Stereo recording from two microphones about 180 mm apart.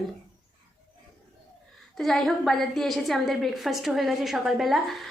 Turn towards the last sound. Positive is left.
turn(degrees=0)  # may be behind; listen again after turning